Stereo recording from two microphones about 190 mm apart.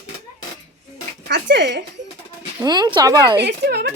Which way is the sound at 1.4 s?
60° right (ahead or behind).